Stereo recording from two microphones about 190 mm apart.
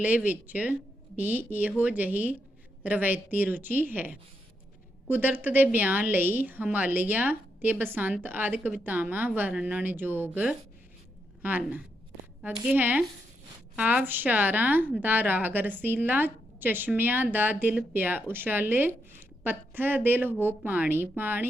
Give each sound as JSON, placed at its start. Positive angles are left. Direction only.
{"t": 0.0, "sound": "a woman's voice", "side_deg": -10}
{"t": 11.4, "sound": "a woman's voice", "side_deg": -10}